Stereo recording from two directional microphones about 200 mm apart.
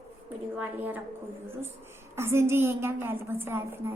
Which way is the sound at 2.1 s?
10° right (ahead or behind).